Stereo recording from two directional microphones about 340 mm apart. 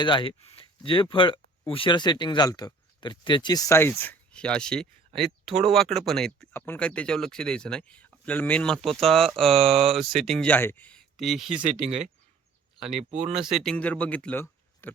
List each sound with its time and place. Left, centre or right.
0.0 s speech: centre
9.6 s speech: centre
10.2 s speech: centre
11.9 s speech: centre
13.5 s speech: centre